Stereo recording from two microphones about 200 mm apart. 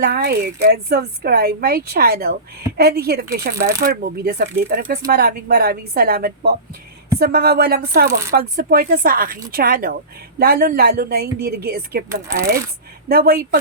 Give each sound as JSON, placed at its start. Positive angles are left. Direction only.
{"t": 0.0, "sound": "speech", "side_deg": -50}
{"t": 12.4, "sound": "speech", "side_deg": -15}
{"t": 13.1, "sound": "speech", "side_deg": -50}